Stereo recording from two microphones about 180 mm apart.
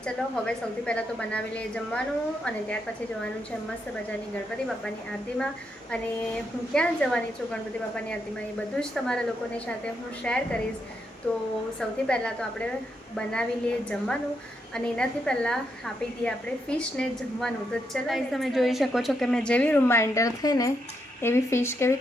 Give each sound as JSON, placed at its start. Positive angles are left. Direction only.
{"t": 0.0, "sound": "a woman's voice", "side_deg": 5}
{"t": 6.7, "sound": "a woman's voice", "side_deg": 5}